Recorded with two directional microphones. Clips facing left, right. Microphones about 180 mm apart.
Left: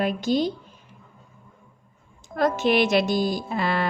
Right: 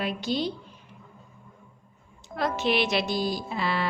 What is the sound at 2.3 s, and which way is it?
A woman's voice, 45° left (ahead or behind).